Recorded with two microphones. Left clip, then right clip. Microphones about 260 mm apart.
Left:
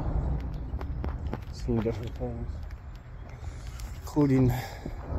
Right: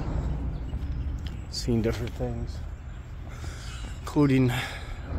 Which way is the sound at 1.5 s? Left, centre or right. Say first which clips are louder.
Right 3 dB; centre.